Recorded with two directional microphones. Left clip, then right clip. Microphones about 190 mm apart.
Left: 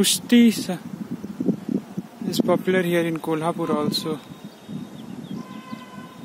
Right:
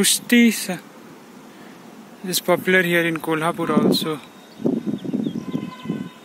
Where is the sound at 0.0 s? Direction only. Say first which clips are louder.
Right 1 dB; 15° left (ahead or behind).